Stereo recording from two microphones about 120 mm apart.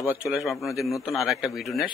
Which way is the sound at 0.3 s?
Centre (ahead or behind).